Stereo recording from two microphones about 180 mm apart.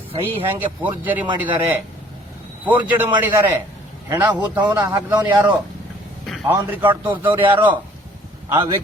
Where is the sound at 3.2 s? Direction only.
15° right (ahead or behind).